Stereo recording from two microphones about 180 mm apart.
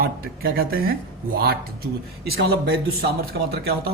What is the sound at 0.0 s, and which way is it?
A man's voice, 60° right (ahead or behind).